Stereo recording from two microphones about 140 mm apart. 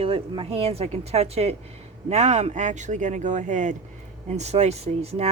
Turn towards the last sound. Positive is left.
turn(degrees=-50)  # may be behind; listen again after turning